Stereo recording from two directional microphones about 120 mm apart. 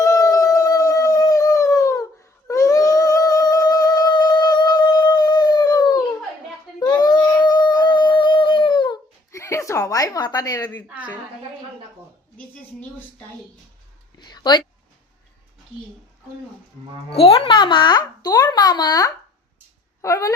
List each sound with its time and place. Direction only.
0.0 s howl: 30° left (ahead or behind)
2.5 s music: 25° left (ahead or behind)
6.7 s a sound: 35° left (ahead or behind)
9.3 s speech: 25° left (ahead or behind)
10.8 s a woman's voice: 15° right (ahead or behind)
14.2 s speech: 35° left (ahead or behind)
17.1 s a child's voice: 55° left (ahead or behind); by 19.1 s 35° left (ahead or behind)
20.0 s a sound: 25° left (ahead or behind)